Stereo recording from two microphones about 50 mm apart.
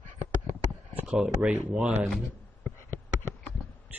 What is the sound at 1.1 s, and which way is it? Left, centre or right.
Speech, right.